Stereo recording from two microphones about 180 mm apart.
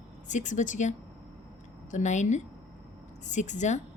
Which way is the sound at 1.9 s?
40° left (ahead or behind).